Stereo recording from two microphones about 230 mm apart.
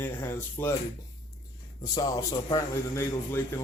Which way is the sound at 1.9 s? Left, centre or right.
Centre.